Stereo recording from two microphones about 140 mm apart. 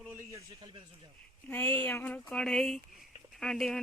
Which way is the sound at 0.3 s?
25° right (ahead or behind).